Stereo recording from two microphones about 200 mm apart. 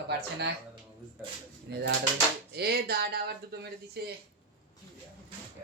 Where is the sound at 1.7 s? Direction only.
55° right (ahead or behind).